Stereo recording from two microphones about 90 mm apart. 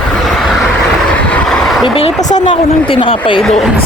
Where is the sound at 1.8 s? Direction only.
90° left; by 3.4 s 75° left (ahead or behind).